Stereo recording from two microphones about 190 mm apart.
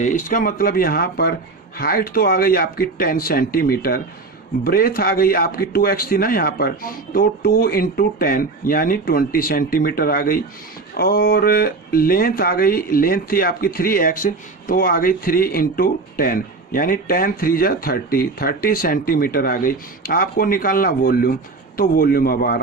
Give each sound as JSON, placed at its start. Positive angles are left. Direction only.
{"t": 0.0, "sound": "speech", "side_deg": 45}